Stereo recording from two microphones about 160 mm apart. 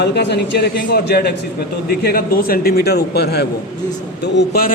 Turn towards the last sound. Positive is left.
turn(degrees=70)  # may be behind; listen again after turning